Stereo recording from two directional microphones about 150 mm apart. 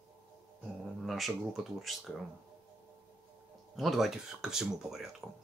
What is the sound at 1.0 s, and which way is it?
Speech, centre (ahead or behind).